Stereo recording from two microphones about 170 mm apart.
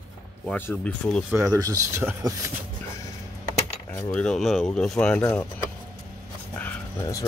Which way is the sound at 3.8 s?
15° left (ahead or behind).